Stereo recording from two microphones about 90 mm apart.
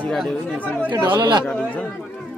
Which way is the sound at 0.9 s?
60° right (ahead or behind).